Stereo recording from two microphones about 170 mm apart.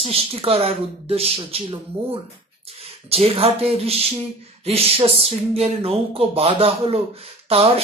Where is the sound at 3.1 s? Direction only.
35° right (ahead or behind).